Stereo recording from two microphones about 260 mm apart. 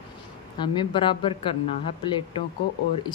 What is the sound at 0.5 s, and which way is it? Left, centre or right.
Speech, centre.